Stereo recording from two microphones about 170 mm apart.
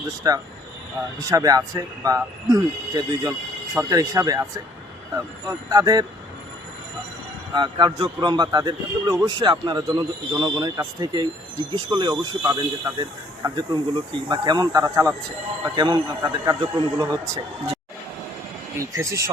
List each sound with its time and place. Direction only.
0.2 s a man's voice: 20° right (ahead or behind)
7.5 s a man's voice: 25° right (ahead or behind)
18.9 s speech: 20° right (ahead or behind)